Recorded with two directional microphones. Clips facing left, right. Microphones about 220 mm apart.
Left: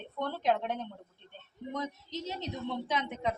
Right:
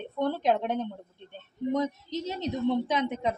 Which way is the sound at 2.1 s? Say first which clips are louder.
Right 6 dB; 15° right (ahead or behind).